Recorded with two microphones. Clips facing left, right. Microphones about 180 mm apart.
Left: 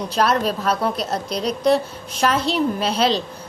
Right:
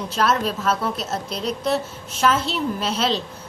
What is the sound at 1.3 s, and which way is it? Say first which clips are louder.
Speech: left 3 dB; 40° left (ahead or behind).